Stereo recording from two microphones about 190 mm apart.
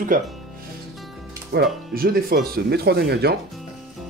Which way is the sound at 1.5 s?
55° right (ahead or behind).